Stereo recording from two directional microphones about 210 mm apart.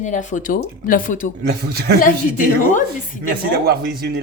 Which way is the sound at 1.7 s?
50° right (ahead or behind).